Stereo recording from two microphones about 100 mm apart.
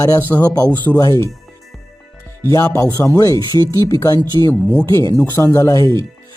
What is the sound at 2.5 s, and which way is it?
Speech, 35° left (ahead or behind).